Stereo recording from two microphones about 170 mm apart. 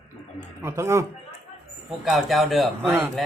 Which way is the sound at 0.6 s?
15° right (ahead or behind).